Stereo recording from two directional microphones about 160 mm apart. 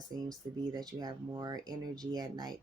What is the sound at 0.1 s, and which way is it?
Speech, 25° right (ahead or behind).